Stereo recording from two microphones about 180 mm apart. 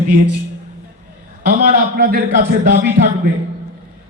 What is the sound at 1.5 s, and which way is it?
A man's voice, 50° right (ahead or behind).